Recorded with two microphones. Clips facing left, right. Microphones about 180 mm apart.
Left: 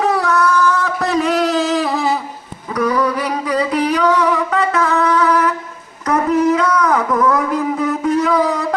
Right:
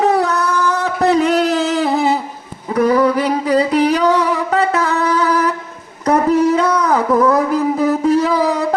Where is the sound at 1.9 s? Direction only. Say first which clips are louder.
Right 3 dB; 25° right (ahead or behind).